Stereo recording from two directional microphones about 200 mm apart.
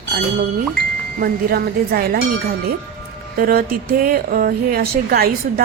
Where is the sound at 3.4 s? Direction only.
50° right (ahead or behind).